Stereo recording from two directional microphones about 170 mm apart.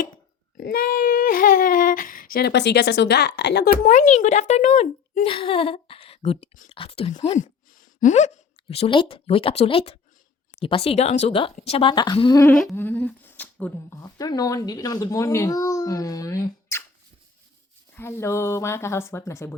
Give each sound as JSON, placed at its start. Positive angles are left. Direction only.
{"t": 0.5, "sound": "a sound", "side_deg": 60}
{"t": 3.9, "sound": "speech", "side_deg": 45}
{"t": 7.3, "sound": "a sound", "side_deg": 50}
{"t": 8.7, "sound": "speech", "side_deg": 35}
{"t": 12.7, "sound": "speech", "side_deg": 10}
{"t": 14.0, "sound": "speech", "side_deg": 20}
{"t": 17.9, "sound": "speech", "side_deg": 15}